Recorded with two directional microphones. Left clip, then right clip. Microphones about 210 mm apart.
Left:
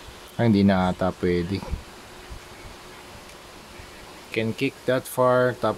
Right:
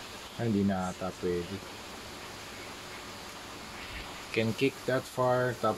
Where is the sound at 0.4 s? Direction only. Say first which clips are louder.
Left 11 dB; 45° left (ahead or behind).